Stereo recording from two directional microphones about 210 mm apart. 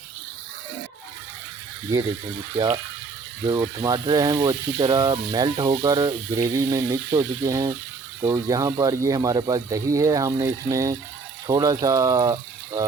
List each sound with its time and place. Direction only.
3.4 s speech: 20° right (ahead or behind)